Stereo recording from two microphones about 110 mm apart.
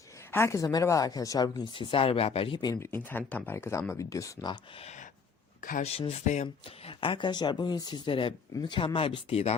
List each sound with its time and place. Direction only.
0.3 s a woman's voice: 25° left (ahead or behind)
1.7 s speech: 55° left (ahead or behind)
2.8 s speech: 20° left (ahead or behind)
5.8 s speech: 65° left (ahead or behind); by 6.9 s 90° left
7.0 s speech: 50° left (ahead or behind); by 9.6 s 70° left (ahead or behind)